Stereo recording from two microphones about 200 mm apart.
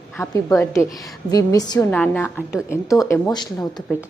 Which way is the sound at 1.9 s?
10° left (ahead or behind).